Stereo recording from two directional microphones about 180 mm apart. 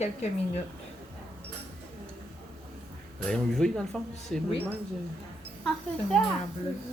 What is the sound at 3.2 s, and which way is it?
Speech, 5° left (ahead or behind).